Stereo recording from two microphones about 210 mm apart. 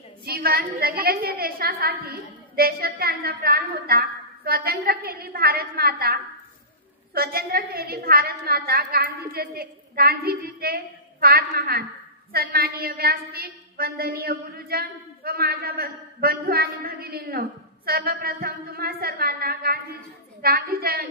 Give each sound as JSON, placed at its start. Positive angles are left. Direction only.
{"t": 0.2, "sound": "a woman's voice", "side_deg": -45}
{"t": 7.2, "sound": "a woman's voice", "side_deg": -45}